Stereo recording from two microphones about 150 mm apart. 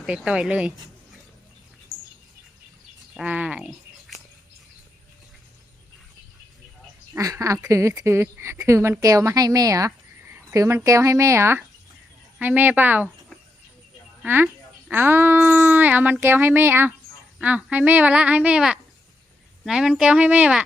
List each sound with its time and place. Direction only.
0.0 s speech: 5° right (ahead or behind)
3.2 s speech: 10° right (ahead or behind)
7.1 s a woman's voice: 20° right (ahead or behind)
14.2 s a woman's voice: 10° right (ahead or behind)